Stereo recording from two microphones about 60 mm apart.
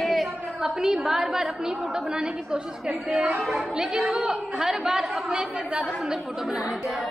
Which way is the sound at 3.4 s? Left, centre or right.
Centre.